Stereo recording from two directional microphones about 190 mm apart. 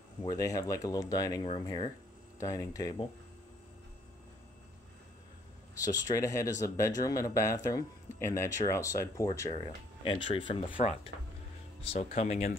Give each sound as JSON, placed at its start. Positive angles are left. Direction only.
{"t": 0.4, "sound": "speech", "side_deg": 20}
{"t": 6.1, "sound": "speech", "side_deg": 15}